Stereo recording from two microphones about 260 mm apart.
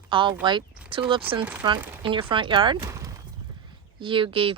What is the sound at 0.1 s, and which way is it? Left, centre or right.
Speech, centre.